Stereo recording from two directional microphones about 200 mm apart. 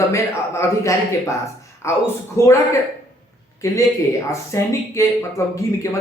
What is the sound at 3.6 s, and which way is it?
Speech, 15° left (ahead or behind).